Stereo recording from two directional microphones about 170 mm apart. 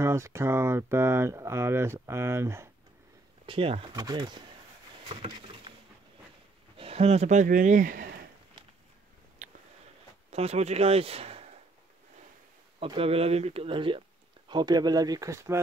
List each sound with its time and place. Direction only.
0.0 s speech: 15° right (ahead or behind)
3.4 s speech: 30° right (ahead or behind)
5.0 s a sound: 30° right (ahead or behind)
6.8 s speech: 35° right (ahead or behind); by 8.1 s 55° right (ahead or behind)
10.3 s speech: 40° right (ahead or behind)
12.8 s speech: 35° right (ahead or behind); by 15.6 s 15° right (ahead or behind)